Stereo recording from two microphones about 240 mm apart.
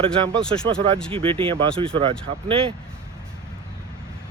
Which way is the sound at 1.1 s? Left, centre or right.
Right.